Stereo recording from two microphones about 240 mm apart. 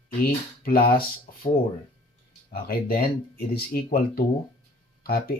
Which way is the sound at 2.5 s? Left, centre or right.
Left.